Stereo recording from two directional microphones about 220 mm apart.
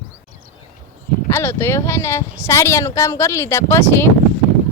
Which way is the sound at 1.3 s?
10° left (ahead or behind).